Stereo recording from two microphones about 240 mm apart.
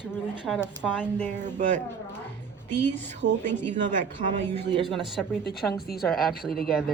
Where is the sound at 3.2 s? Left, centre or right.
Right.